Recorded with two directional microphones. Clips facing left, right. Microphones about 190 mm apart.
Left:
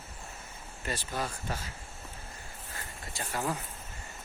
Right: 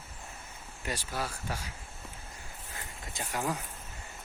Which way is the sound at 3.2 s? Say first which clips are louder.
Even; 10° right (ahead or behind).